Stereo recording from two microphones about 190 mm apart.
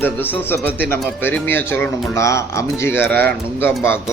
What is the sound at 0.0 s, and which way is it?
Speech, 10° left (ahead or behind).